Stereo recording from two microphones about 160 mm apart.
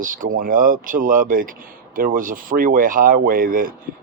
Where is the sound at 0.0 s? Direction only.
60° right (ahead or behind).